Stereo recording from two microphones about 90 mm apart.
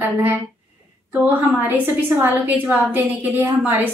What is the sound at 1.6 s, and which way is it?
A woman's voice, 20° right (ahead or behind).